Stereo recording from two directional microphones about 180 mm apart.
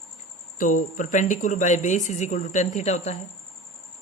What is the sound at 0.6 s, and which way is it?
Speech, 45° left (ahead or behind).